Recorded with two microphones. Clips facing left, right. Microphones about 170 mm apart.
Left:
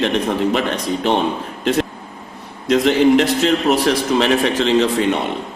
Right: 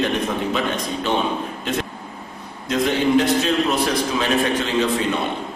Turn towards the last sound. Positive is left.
turn(degrees=75)  # may be behind; listen again after turning